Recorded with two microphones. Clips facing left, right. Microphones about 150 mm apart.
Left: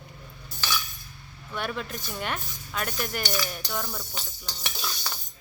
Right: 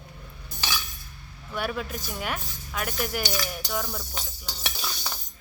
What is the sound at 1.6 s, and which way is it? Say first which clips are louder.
Speech: right 2 dB; 5° right (ahead or behind).